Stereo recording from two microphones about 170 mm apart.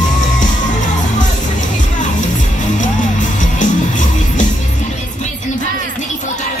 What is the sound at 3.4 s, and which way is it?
Music, 50° left (ahead or behind).